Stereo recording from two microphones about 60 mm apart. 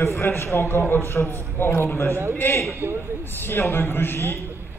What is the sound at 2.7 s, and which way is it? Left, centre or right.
Speech, right.